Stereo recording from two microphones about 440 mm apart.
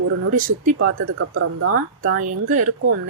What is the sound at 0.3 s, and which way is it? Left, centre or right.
Speech, centre.